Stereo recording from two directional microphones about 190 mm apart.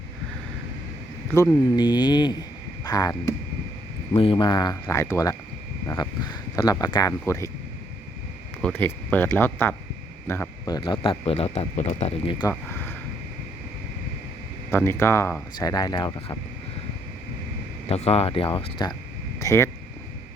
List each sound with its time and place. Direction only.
1.3 s speech: 15° left (ahead or behind)
4.1 s speech: 25° left (ahead or behind)
6.6 s speech: 20° left (ahead or behind)
8.6 s speech: 10° left (ahead or behind); by 12.5 s 25° left (ahead or behind)
12.5 s speech: 10° left (ahead or behind)
14.7 s speech: 10° left (ahead or behind)
17.8 s speech: 30° left (ahead or behind); by 19.7 s 15° left (ahead or behind)